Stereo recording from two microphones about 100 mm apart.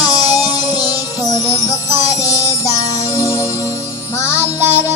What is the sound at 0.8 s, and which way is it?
Music, 35° left (ahead or behind).